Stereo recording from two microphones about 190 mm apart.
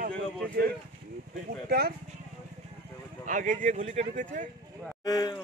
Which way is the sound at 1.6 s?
55° right (ahead or behind).